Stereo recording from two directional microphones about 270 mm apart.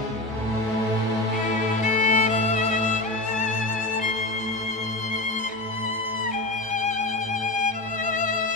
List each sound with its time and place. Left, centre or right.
2.0 s music: left